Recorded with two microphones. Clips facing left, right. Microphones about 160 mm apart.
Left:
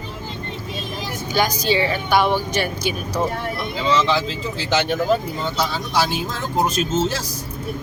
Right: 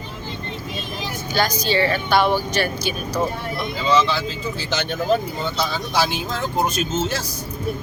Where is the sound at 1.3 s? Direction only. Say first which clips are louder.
Left 1 dB; 15° left (ahead or behind).